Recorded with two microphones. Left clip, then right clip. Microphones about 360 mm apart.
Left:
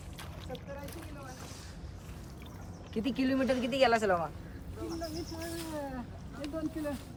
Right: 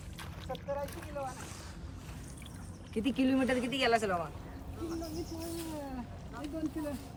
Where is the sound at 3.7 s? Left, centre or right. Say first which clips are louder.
Left 5 dB; left.